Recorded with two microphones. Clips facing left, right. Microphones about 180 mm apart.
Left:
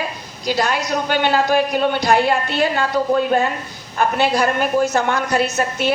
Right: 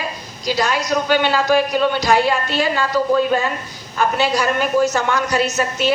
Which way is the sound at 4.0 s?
55° left (ahead or behind).